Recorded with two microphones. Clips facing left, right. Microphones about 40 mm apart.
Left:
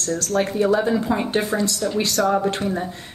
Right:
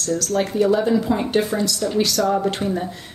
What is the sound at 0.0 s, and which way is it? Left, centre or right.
A woman's voice, left.